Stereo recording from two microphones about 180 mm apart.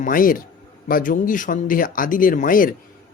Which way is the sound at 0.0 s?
50° left (ahead or behind).